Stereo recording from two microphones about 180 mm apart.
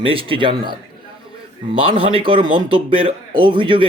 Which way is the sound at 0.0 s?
30° right (ahead or behind).